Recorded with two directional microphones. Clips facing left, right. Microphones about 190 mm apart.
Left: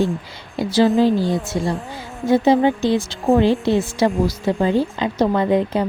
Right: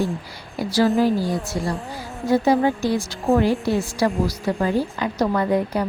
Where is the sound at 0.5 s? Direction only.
25° left (ahead or behind).